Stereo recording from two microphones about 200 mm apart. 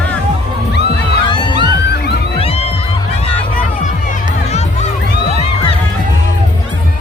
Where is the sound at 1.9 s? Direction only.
55° left (ahead or behind).